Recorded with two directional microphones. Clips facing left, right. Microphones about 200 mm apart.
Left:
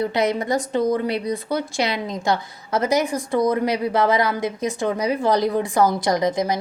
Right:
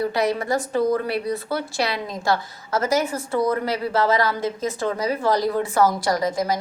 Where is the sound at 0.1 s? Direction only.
20° left (ahead or behind).